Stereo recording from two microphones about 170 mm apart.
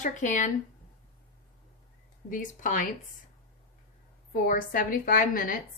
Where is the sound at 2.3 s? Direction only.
50° left (ahead or behind).